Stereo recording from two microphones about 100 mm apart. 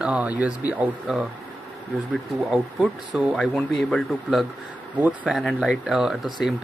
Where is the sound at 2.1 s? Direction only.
Centre (ahead or behind).